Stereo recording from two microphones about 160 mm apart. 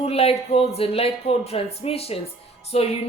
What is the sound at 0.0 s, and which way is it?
A woman's voice, 40° left (ahead or behind).